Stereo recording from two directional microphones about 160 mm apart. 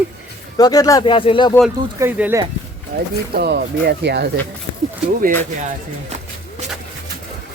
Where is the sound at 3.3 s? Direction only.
85° right.